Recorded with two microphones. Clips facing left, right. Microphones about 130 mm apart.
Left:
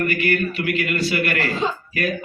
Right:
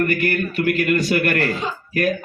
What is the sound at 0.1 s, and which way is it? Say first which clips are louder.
A man's voice: even; 45° right (ahead or behind).